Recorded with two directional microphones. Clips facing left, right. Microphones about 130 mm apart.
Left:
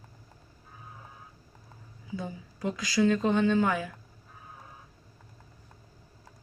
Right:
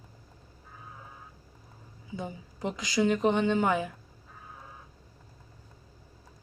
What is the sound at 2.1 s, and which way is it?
Speech, 20° right (ahead or behind).